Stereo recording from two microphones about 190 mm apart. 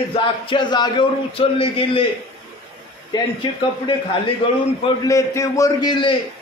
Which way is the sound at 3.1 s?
25° left (ahead or behind).